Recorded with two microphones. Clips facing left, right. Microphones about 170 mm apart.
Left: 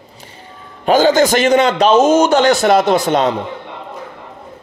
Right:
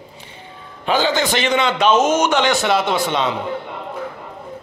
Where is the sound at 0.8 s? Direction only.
45° left (ahead or behind).